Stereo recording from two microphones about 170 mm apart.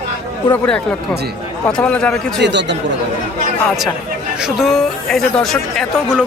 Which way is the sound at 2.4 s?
90° right.